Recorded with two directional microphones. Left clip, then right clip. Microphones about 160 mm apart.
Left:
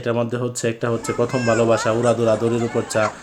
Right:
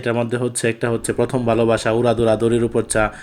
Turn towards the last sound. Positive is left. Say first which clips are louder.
# right 2 dB
turn(degrees=-15)  # may be behind; listen again after turning